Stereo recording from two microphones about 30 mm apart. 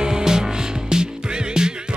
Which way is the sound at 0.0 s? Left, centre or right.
Right.